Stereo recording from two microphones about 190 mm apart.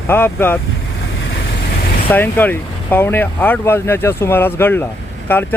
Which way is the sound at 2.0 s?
10° left (ahead or behind).